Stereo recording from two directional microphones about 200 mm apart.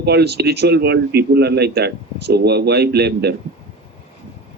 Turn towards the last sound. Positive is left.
turn(degrees=-55)  # may be behind; listen again after turning